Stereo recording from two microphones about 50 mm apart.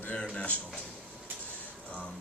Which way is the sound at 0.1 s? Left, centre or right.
Left.